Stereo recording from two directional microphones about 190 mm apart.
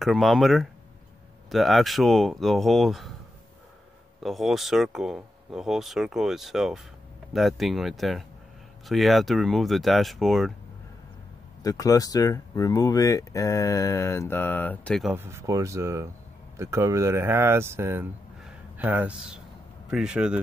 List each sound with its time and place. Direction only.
0.0 s speech: centre (ahead or behind)
4.2 s speech: centre (ahead or behind)
11.6 s speech: 15° left (ahead or behind)
15.1 s speech: 15° right (ahead or behind)
18.4 s a sound: 10° right (ahead or behind)
19.9 s speech: 5° right (ahead or behind)